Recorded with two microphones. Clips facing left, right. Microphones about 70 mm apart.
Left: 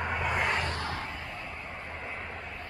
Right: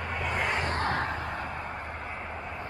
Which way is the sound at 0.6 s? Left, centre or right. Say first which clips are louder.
Right 5 dB; right.